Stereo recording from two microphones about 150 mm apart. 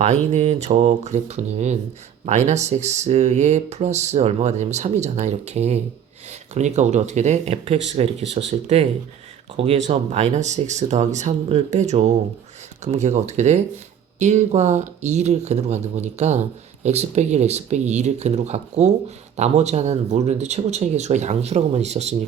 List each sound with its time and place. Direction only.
0.0 s speech: 45° right (ahead or behind)